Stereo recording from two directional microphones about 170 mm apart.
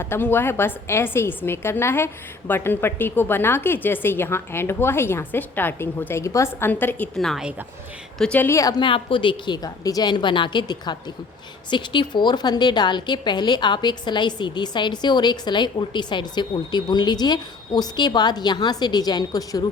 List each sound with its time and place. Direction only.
0.0 s a woman's voice: 15° left (ahead or behind)
8.8 s a woman's voice: 30° left (ahead or behind)